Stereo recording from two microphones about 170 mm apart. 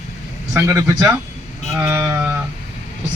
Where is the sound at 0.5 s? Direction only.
15° right (ahead or behind).